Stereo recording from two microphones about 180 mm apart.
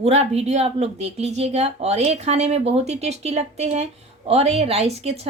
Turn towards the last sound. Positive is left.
turn(degrees=-35)  # may be behind; listen again after turning